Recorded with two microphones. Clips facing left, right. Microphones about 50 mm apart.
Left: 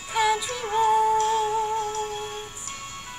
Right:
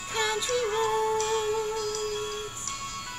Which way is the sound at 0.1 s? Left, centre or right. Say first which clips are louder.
Left 4 dB; centre.